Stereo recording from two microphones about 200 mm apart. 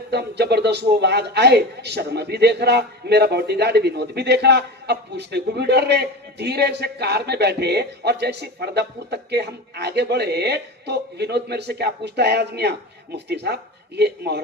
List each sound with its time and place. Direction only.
0.1 s a man's voice: 55° right (ahead or behind)